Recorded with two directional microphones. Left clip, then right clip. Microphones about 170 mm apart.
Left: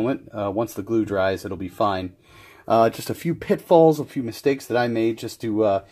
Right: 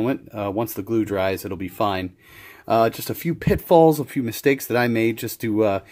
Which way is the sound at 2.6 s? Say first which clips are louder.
Left 1 dB; 15° right (ahead or behind).